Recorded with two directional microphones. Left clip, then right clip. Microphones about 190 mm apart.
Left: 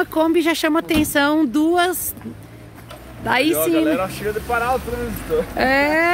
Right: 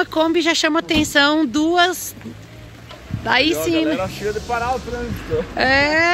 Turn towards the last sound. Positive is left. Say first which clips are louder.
# right 1 dB
turn(degrees=10)  # may be behind; listen again after turning